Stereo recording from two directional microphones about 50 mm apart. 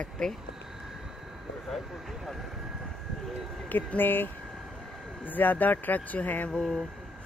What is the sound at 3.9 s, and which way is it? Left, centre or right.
Speech, left.